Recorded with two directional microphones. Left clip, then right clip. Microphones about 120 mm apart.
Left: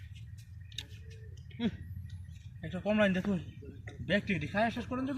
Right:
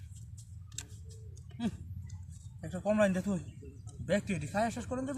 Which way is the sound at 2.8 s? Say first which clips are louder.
Even; 35° right (ahead or behind).